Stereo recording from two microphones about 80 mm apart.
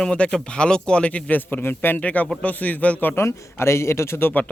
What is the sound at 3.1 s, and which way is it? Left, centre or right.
Speech, left.